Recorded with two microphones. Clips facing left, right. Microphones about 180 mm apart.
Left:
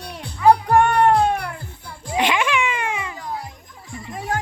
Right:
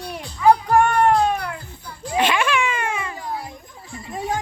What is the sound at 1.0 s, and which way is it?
Cat, 30° left (ahead or behind).